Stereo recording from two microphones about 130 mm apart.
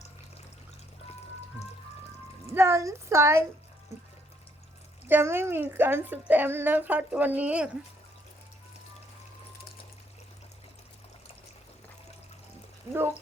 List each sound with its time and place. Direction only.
2.6 s a woman's voice: 20° right (ahead or behind)
5.0 s a woman's voice: 15° right (ahead or behind)